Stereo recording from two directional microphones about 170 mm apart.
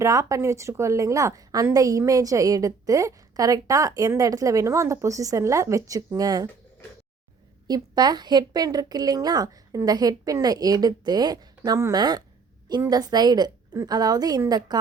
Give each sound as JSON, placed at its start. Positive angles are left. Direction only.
{"t": 0.0, "sound": "a woman's voice", "side_deg": -20}
{"t": 7.7, "sound": "a woman's voice", "side_deg": -25}